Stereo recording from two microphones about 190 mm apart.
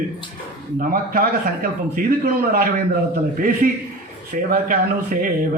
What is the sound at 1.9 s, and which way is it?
Speech, 50° right (ahead or behind).